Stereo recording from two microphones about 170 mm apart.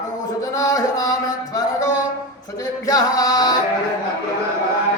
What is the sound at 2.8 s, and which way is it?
Music, 20° left (ahead or behind).